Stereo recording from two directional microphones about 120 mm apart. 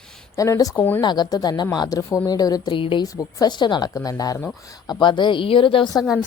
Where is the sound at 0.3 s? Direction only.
30° left (ahead or behind).